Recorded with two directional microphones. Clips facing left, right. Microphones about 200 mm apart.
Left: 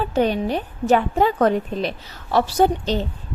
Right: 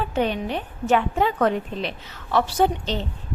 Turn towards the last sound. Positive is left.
turn(degrees=40)  # may be behind; listen again after turning